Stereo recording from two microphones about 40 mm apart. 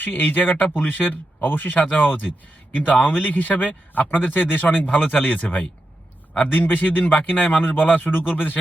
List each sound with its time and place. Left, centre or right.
0.0 s speech: left
1.7 s speech: left